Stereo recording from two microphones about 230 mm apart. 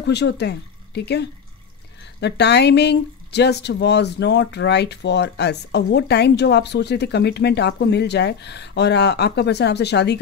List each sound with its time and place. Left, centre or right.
0.0 s speech: left